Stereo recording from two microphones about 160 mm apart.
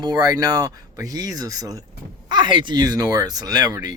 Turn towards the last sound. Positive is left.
turn(degrees=-25)  # may be behind; listen again after turning